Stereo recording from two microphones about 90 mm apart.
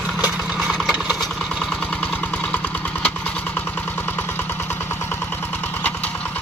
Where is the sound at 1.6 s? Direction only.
10° left (ahead or behind).